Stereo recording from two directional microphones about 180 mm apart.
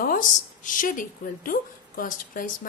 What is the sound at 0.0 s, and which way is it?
A woman's voice, 50° left (ahead or behind).